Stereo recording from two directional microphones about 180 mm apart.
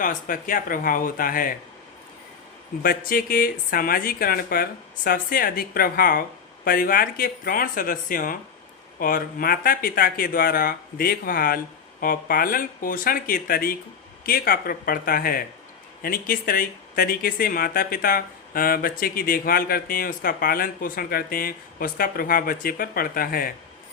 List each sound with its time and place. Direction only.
0.0 s speech: 45° left (ahead or behind)
2.8 s speech: 55° left (ahead or behind)